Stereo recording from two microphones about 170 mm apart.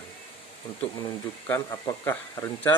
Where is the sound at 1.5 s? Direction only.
15° left (ahead or behind).